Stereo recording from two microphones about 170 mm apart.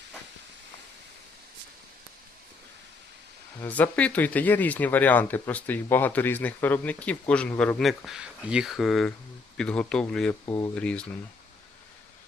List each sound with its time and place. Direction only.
3.6 s speech: 10° left (ahead or behind)
10.4 s speech: 20° left (ahead or behind)
10.8 s speech: 5° left (ahead or behind)